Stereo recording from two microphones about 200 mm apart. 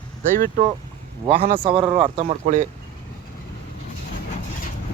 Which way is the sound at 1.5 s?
25° right (ahead or behind).